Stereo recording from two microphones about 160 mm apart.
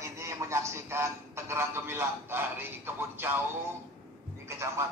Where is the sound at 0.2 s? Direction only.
15° right (ahead or behind).